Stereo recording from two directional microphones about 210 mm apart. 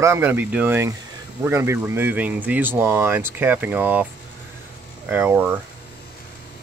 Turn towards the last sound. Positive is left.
turn(degrees=-10)  # may be behind; listen again after turning